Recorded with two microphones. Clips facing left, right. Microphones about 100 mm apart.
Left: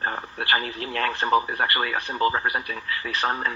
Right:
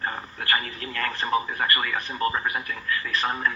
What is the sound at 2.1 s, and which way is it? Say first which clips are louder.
A man's voice: left 4 dB; 30° left (ahead or behind).